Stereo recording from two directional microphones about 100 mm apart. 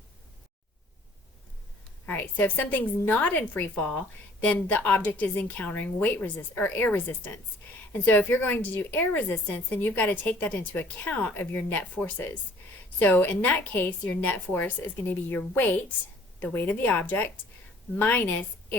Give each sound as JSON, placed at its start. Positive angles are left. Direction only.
{"t": 2.0, "sound": "a woman's voice", "side_deg": 20}